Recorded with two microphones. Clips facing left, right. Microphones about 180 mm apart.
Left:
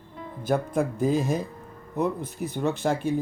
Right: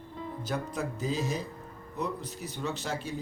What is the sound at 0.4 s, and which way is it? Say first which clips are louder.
Speech: left 10 dB; 55° left (ahead or behind).